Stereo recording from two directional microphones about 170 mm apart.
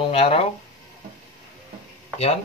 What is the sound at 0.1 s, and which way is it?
Speech, 35° left (ahead or behind).